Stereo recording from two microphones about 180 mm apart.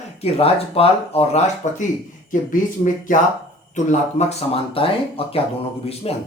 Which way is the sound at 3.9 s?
35° left (ahead or behind).